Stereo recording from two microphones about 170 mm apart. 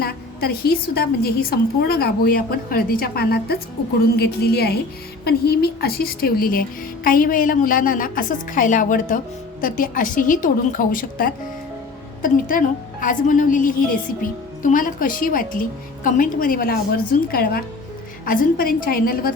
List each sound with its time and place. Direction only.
0.0 s a woman's voice: 65° left (ahead or behind)